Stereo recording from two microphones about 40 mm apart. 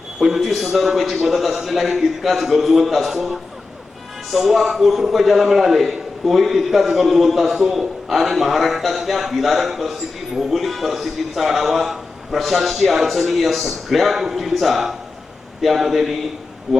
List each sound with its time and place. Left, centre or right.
0.2 s a man's voice: centre